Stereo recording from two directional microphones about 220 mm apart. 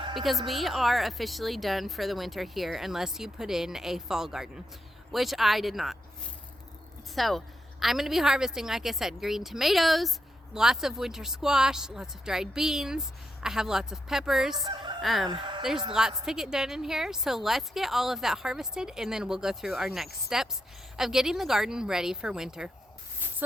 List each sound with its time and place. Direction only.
0.1 s a woman's voice: centre (ahead or behind)
7.2 s a woman's voice: centre (ahead or behind)
14.5 s fowl: 20° right (ahead or behind)
15.0 s a woman's voice: centre (ahead or behind)
15.3 s speech: 20° right (ahead or behind)
15.9 s a woman's voice: 5° right (ahead or behind)